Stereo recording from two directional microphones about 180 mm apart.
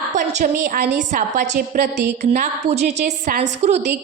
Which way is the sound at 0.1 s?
45° right (ahead or behind).